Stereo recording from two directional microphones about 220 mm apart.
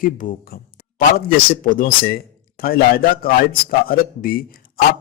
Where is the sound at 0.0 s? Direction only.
40° left (ahead or behind).